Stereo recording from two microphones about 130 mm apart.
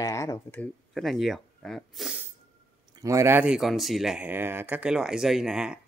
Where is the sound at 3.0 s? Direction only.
25° right (ahead or behind).